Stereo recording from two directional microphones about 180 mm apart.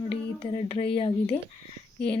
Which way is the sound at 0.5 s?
30° left (ahead or behind).